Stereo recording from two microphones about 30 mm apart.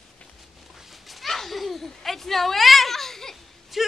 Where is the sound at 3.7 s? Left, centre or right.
Centre.